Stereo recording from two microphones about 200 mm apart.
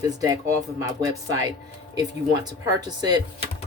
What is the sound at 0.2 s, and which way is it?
Speech, 15° right (ahead or behind).